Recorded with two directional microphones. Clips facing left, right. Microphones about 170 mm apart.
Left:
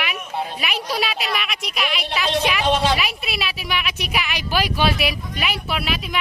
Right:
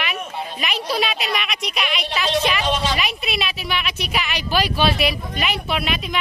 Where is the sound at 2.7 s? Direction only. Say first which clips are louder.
Left 3 dB; 60° left (ahead or behind).